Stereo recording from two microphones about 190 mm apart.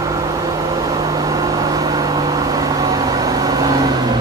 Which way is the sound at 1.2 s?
20° right (ahead or behind).